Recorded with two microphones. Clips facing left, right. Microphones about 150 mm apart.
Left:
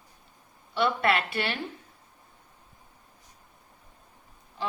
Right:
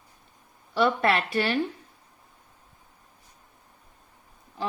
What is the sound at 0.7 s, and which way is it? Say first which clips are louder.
Speech: right 2 dB; 40° right (ahead or behind).